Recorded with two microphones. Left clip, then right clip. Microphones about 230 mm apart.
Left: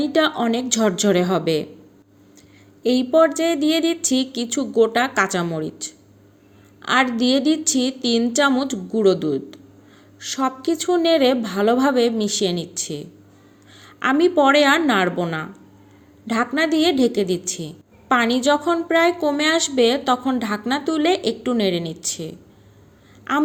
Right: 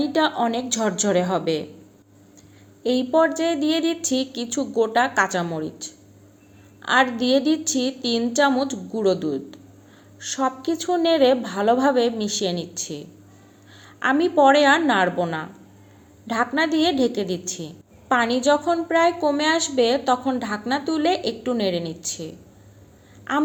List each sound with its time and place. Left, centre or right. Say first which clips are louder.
0.0 s a woman's voice: left 2 dB; left
2.8 s a woman's voice: left 3 dB; left